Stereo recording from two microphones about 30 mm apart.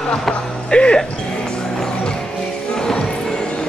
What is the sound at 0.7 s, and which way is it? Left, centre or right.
Music, left.